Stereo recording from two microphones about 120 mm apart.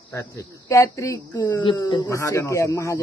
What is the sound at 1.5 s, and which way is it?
Speech, 40° left (ahead or behind).